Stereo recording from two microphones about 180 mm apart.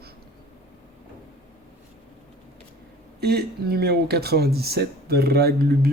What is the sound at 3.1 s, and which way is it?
Speech, 60° right (ahead or behind).